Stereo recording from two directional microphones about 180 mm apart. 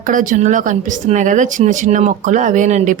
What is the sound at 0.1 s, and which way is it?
Speech, 45° right (ahead or behind).